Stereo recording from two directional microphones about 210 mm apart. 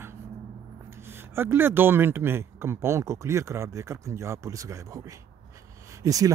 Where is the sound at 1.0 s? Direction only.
10° right (ahead or behind).